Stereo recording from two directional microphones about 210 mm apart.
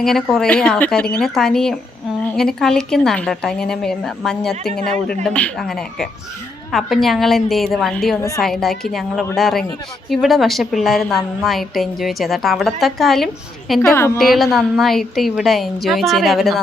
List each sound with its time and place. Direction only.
0.0 s speech: centre (ahead or behind)
13.8 s a woman's voice: 10° left (ahead or behind)
14.2 s speech: centre (ahead or behind)